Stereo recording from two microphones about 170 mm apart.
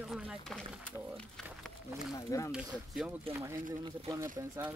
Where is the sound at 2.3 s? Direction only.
20° left (ahead or behind).